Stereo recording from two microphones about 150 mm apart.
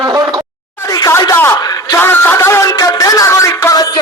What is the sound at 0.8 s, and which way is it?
A man's voice, 25° left (ahead or behind).